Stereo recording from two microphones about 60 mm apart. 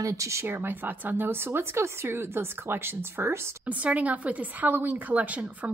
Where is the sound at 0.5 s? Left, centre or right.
Right.